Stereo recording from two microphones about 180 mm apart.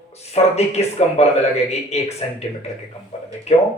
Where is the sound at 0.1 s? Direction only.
35° left (ahead or behind).